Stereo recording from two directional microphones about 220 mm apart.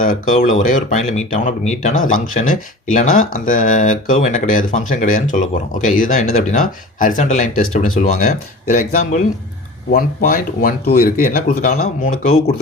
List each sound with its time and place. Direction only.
0.0 s speech: 40° left (ahead or behind)